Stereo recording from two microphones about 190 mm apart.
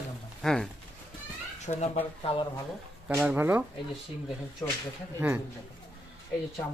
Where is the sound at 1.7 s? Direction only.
35° left (ahead or behind).